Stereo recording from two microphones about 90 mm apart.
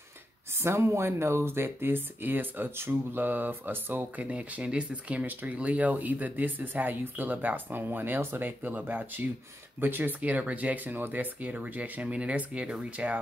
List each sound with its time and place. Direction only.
0.6 s speech: 30° right (ahead or behind); by 13.2 s 15° right (ahead or behind)